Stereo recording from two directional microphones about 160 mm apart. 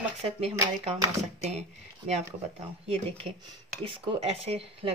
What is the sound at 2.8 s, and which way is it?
Speech, 35° right (ahead or behind).